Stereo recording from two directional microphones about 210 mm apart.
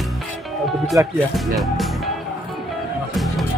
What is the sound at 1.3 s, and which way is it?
Speech, centre (ahead or behind).